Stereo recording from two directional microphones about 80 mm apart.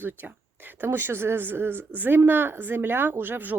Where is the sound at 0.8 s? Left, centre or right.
Right.